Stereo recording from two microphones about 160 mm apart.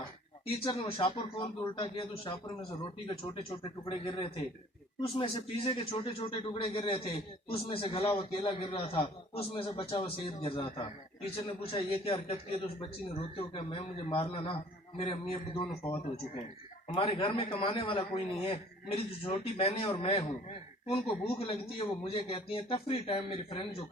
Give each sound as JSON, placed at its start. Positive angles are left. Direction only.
{"t": 0.4, "sound": "a man's voice", "side_deg": 35}
{"t": 16.9, "sound": "a man's voice", "side_deg": 35}